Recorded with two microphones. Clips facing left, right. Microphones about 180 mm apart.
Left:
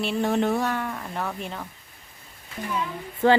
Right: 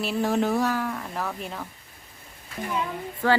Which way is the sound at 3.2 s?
20° left (ahead or behind).